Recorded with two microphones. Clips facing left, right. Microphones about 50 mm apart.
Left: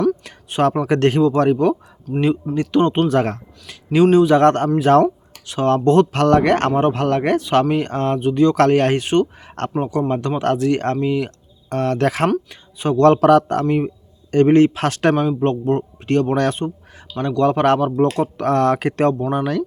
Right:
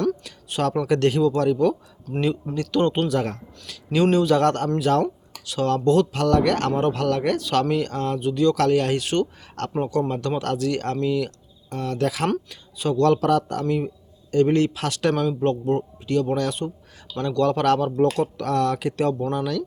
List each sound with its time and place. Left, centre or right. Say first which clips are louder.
0.2 s a sound: left 6 dB; left
0.9 s speech: left 4 dB; left
2.6 s speech: left 4 dB; left
3.1 s speech: left 6 dB; left
4.0 s a man's voice: left 7 dB; centre
4.3 s speech: left 6 dB; left
11.7 s speech: left 6 dB; left
13.7 s speech: left 5 dB; left
15.1 s speech: left 4 dB; left
16.0 s speech: left 6 dB; left
17.2 s speech: left 4 dB; left
18.1 s speech: left 5 dB; left
19.3 s speech: left 5 dB; left